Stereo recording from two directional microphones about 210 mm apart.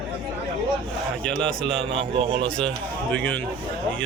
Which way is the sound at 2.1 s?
25° right (ahead or behind).